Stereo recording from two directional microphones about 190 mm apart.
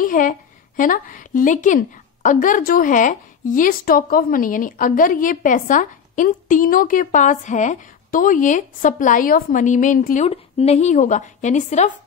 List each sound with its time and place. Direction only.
0.0 s a woman's voice: 45° left (ahead or behind)